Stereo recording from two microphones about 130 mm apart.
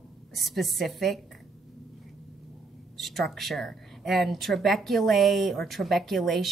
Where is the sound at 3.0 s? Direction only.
Centre (ahead or behind).